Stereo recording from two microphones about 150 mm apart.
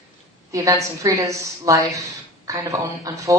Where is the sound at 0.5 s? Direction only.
20° right (ahead or behind).